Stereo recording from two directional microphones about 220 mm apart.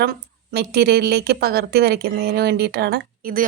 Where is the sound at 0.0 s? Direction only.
45° right (ahead or behind).